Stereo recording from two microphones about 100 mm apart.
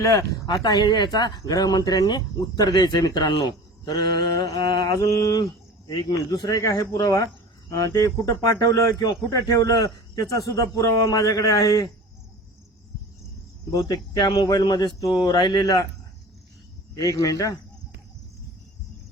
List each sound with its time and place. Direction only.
0.0 s speech: 35° left (ahead or behind)
5.9 s speech: 50° left (ahead or behind)
13.7 s speech: 40° left (ahead or behind)
17.0 s speech: 35° left (ahead or behind)